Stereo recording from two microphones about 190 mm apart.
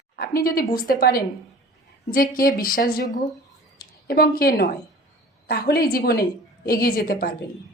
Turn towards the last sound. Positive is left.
turn(degrees=50)  # may be behind; listen again after turning